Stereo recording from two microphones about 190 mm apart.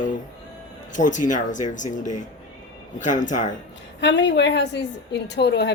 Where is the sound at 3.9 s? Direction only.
70° left (ahead or behind).